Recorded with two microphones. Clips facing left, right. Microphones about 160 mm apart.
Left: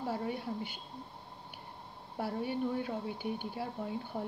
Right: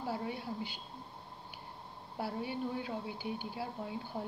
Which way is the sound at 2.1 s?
50° left (ahead or behind).